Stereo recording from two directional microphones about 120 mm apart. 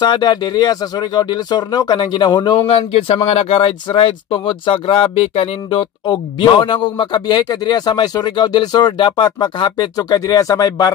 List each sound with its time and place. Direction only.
0.0 s speech: 40° left (ahead or behind)
2.7 s speech: 55° left (ahead or behind); by 10.9 s 30° left (ahead or behind)